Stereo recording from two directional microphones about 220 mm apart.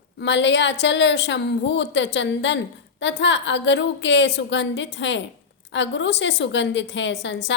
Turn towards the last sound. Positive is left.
turn(degrees=55)  # may be behind; listen again after turning